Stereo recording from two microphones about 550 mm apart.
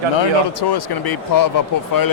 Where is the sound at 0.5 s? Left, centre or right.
Left.